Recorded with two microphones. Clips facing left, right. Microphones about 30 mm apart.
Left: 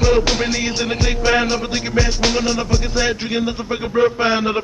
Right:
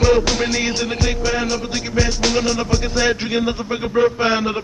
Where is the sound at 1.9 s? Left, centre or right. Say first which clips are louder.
Even; centre.